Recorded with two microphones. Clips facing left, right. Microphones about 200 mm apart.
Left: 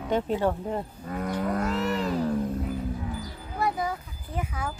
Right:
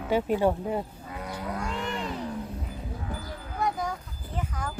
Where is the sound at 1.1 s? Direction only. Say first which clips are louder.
Left 6 dB; 50° left (ahead or behind).